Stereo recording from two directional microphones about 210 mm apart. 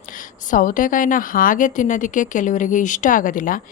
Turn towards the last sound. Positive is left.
turn(degrees=40)  # may be behind; listen again after turning